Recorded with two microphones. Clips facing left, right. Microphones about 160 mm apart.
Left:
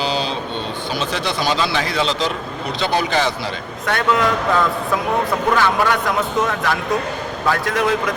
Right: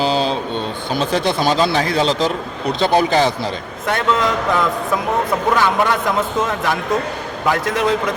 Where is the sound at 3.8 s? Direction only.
25° right (ahead or behind).